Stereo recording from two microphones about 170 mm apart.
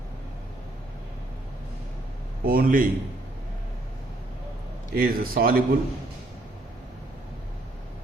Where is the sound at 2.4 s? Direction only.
60° right (ahead or behind).